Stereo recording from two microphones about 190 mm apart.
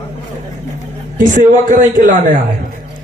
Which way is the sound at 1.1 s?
40° right (ahead or behind).